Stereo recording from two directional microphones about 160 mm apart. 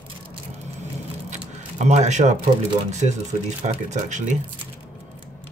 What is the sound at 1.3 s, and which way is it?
Speech, 45° right (ahead or behind).